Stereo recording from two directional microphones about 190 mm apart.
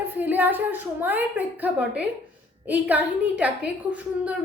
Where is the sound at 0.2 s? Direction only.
10° right (ahead or behind).